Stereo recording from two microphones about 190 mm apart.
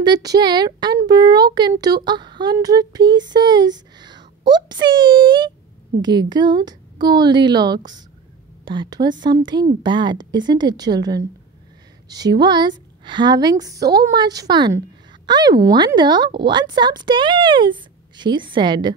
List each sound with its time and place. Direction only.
0.0 s speech: 20° right (ahead or behind)
2.0 s a sound: 25° right (ahead or behind)
6.0 s speech: 20° right (ahead or behind)